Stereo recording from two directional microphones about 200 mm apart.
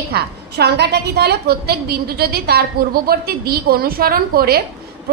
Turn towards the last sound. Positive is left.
turn(degrees=-50)  # may be behind; listen again after turning